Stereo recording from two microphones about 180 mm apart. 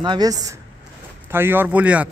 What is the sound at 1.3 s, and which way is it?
Speech, 10° right (ahead or behind).